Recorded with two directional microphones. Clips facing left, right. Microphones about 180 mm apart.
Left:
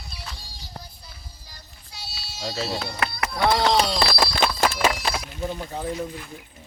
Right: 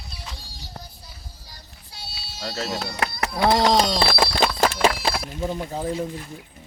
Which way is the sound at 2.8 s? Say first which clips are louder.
Right 1 dB; 30° right (ahead or behind).